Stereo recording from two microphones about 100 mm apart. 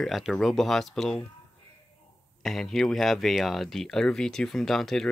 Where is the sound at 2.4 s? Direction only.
Centre (ahead or behind).